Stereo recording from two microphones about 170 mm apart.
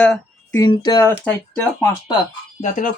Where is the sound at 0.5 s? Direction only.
25° left (ahead or behind).